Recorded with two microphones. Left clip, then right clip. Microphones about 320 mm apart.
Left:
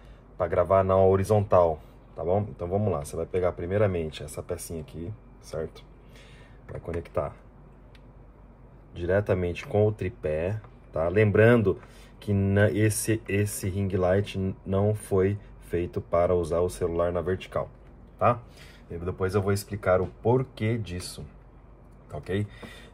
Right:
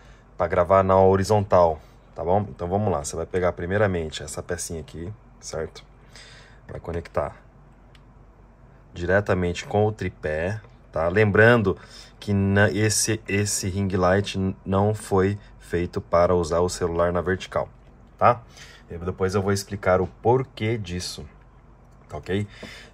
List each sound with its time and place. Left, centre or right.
0.4 s speech: centre
8.9 s speech: centre
19.0 s speech: right
22.1 s speech: right